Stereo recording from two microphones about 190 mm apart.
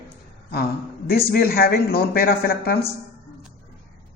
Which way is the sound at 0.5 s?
55° left (ahead or behind).